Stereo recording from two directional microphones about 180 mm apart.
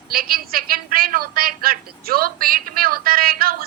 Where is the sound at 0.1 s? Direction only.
55° right (ahead or behind).